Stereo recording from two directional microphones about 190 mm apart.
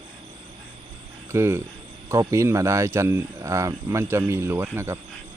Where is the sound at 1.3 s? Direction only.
15° right (ahead or behind).